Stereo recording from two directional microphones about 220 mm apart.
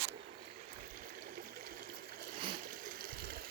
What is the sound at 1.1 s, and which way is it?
Stream, 40° right (ahead or behind).